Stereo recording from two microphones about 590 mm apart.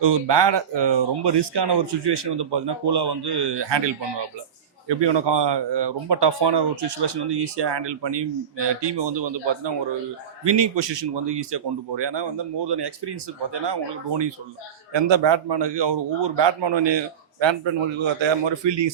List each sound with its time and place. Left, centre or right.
0.0 s speech: right